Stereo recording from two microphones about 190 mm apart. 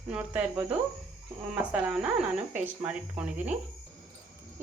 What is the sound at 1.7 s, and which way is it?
Speech, 5° right (ahead or behind).